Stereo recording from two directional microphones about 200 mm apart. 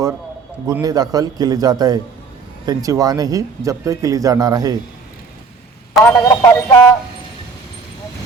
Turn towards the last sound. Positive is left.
turn(degrees=15)  # may be behind; listen again after turning